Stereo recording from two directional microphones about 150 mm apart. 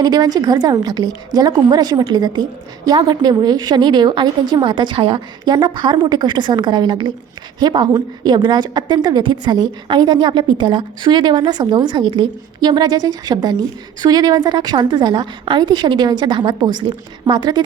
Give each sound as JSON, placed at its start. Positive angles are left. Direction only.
{"t": 0.0, "sound": "a woman's voice", "side_deg": -25}